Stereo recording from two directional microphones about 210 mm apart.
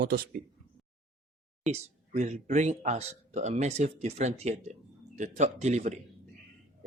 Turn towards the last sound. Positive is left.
turn(degrees=-35)  # may be behind; listen again after turning